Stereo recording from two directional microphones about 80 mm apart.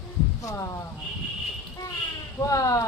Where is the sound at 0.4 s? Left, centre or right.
Left.